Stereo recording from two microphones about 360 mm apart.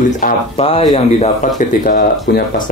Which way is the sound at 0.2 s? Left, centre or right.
Centre.